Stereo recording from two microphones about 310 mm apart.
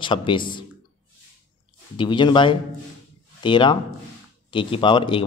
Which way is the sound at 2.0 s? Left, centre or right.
Centre.